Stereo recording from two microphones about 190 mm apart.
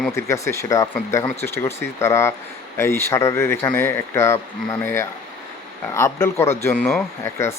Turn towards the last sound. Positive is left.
turn(degrees=15)  # may be behind; listen again after turning